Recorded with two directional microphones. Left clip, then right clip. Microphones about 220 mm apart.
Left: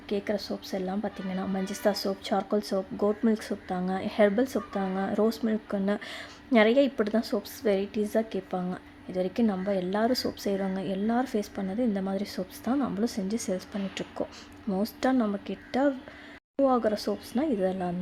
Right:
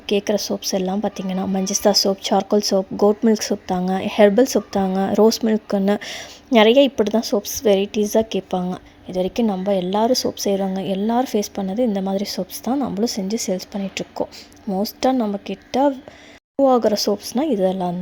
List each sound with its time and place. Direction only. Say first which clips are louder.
0.1 s speech: right 11 dB; 30° right (ahead or behind)